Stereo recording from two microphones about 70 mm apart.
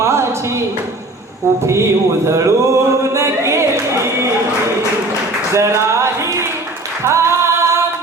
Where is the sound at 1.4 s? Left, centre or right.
Right.